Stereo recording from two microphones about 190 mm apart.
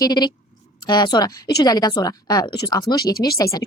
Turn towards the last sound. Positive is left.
turn(degrees=20)  # may be behind; listen again after turning